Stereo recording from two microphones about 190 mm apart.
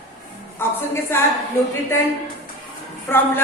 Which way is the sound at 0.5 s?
10° left (ahead or behind).